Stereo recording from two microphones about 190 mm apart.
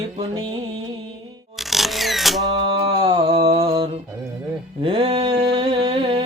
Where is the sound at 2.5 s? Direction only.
30° right (ahead or behind).